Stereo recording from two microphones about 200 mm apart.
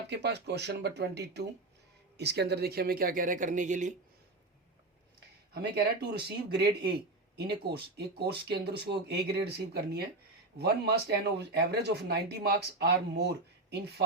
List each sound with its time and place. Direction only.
0.1 s speech: 55° right (ahead or behind); by 3.9 s 40° right (ahead or behind)
5.5 s speech: 55° right (ahead or behind)